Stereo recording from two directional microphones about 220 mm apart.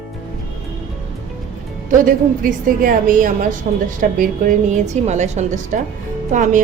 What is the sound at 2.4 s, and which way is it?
A woman's voice, 40° right (ahead or behind).